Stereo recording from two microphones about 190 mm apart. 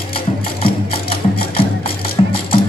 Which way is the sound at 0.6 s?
30° left (ahead or behind).